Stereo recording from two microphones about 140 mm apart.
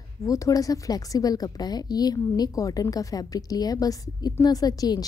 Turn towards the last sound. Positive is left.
turn(degrees=30)  # may be behind; listen again after turning